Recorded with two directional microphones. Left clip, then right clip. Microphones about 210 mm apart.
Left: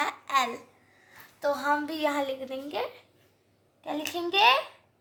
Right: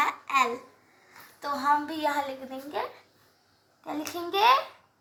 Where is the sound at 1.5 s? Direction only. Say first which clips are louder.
Right 2 dB; 45° left (ahead or behind).